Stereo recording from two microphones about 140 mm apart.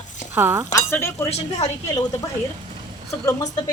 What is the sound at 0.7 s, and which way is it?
Speech, 20° left (ahead or behind).